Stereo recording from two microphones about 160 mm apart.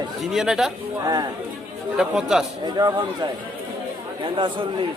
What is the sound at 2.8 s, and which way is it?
Speech, 25° right (ahead or behind).